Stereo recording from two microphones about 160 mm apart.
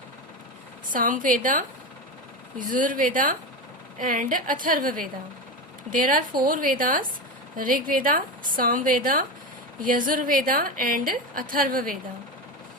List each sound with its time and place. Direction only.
0.9 s a woman's voice: 55° right (ahead or behind)